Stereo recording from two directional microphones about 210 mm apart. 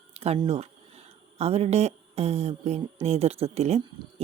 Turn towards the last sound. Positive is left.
turn(degrees=-30)  # may be behind; listen again after turning